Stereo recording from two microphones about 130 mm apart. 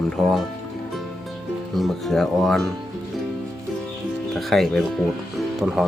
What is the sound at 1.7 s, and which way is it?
Speech, centre (ahead or behind).